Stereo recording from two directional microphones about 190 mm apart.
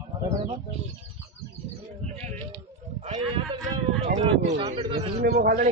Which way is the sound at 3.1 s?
25° right (ahead or behind).